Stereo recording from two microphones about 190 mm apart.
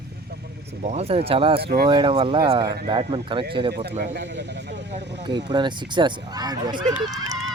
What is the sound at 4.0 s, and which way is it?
Speech, 60° right (ahead or behind).